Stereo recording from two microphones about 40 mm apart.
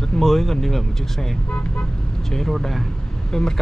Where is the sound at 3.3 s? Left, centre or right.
Centre.